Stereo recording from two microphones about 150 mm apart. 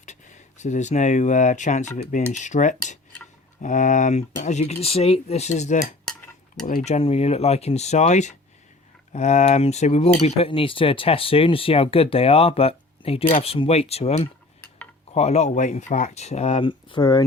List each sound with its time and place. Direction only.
0.0 s speech: 50° left (ahead or behind)
16.6 s speech: 30° left (ahead or behind)